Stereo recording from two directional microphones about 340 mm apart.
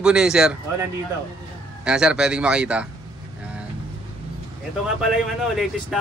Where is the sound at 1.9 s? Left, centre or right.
Centre.